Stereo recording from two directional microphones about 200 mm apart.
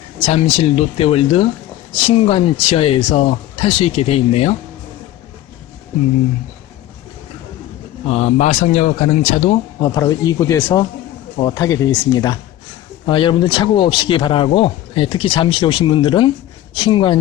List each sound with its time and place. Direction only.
0.3 s a man's voice: 30° left (ahead or behind)
8.0 s a man's voice: 30° left (ahead or behind)
9.8 s speech: 20° left (ahead or behind)